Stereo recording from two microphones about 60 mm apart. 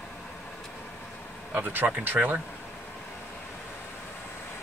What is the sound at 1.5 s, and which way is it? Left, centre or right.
Speech, right.